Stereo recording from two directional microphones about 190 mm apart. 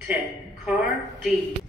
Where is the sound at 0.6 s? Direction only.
5° right (ahead or behind).